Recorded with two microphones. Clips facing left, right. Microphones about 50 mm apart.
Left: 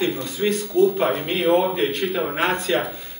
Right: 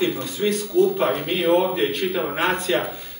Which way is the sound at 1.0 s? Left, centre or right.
Centre.